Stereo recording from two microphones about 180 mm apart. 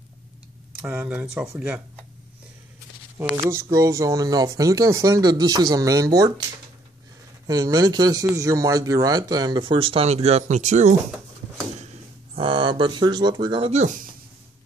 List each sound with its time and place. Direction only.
0.7 s speech: 10° right (ahead or behind)
3.2 s speech: 15° right (ahead or behind)
7.4 s speech: 20° right (ahead or behind); by 11.0 s 40° right (ahead or behind)
12.4 s speech: 25° right (ahead or behind)